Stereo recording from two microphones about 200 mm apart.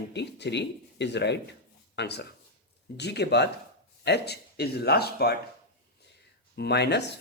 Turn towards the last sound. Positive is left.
turn(degrees=60)  # may be behind; listen again after turning